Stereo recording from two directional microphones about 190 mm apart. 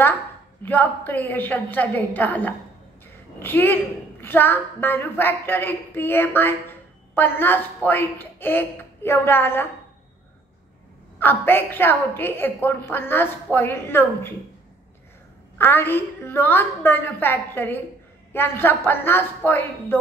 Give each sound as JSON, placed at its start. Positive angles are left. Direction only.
{"t": 0.7, "sound": "a woman's voice", "side_deg": 10}
{"t": 11.1, "sound": "a woman's voice", "side_deg": 10}
{"t": 15.5, "sound": "a woman's voice", "side_deg": 10}